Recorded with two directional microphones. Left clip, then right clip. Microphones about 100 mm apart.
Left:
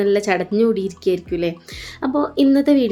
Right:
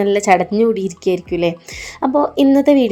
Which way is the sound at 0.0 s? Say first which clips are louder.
Right 5 dB; 40° right (ahead or behind).